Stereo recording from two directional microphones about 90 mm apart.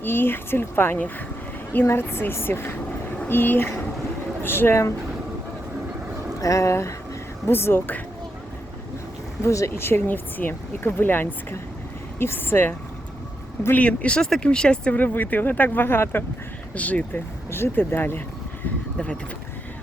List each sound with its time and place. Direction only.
0.0 s speech: 25° left (ahead or behind)
6.4 s speech: 35° left (ahead or behind)
9.4 s speech: 35° left (ahead or behind)
18.9 s speech: 10° left (ahead or behind)